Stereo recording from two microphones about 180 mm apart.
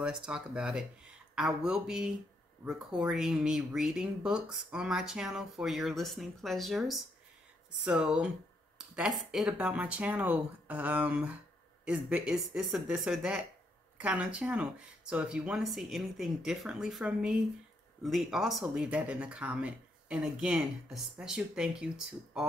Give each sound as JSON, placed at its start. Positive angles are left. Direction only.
{"t": 0.2, "sound": "speech", "side_deg": -5}